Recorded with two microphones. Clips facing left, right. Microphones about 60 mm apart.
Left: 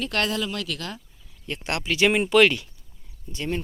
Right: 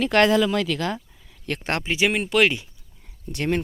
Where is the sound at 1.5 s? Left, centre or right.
Right.